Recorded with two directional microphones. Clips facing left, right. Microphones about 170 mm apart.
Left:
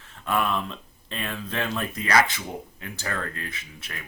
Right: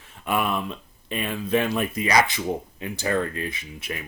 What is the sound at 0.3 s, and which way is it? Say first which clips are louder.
Speech: right 1 dB; 10° right (ahead or behind).